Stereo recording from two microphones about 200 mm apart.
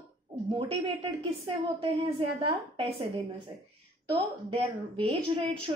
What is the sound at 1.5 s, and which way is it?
A woman's voice, 25° right (ahead or behind).